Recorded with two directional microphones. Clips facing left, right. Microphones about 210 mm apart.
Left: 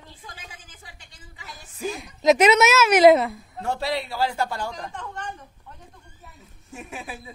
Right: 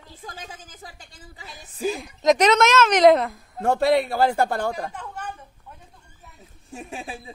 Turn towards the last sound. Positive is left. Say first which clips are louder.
# right 2 dB
turn(degrees=-30)  # may be behind; listen again after turning